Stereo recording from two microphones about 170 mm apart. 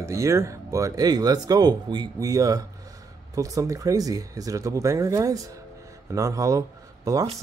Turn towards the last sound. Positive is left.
turn(degrees=-20)  # may be behind; listen again after turning